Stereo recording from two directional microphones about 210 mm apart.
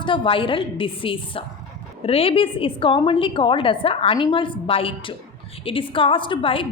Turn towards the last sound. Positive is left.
turn(degrees=25)  # may be behind; listen again after turning